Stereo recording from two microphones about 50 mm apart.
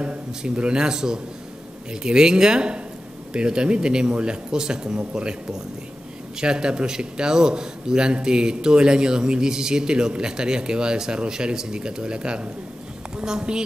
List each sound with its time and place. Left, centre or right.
0.4 s speech: centre